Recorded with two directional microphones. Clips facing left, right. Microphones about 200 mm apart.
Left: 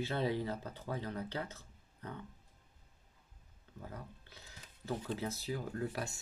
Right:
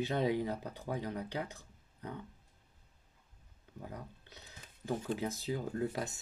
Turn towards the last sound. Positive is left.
turn(degrees=-20)  # may be behind; listen again after turning